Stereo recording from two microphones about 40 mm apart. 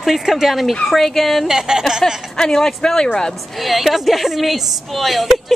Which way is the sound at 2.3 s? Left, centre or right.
Centre.